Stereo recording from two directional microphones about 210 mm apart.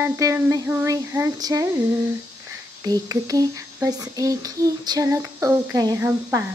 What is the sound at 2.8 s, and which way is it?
Speech, 15° right (ahead or behind).